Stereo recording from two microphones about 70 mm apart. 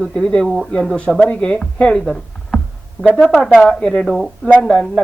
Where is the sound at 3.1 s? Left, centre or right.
Left.